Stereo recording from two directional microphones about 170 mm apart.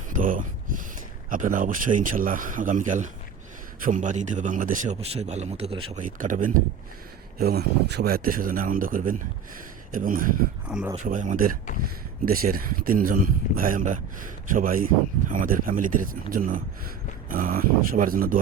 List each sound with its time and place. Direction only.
0.2 s a sound: 55° right (ahead or behind)
1.3 s speech: 50° right (ahead or behind); by 5.8 s 35° right (ahead or behind)
6.0 s speech: 50° right (ahead or behind)
7.3 s speech: 70° right (ahead or behind)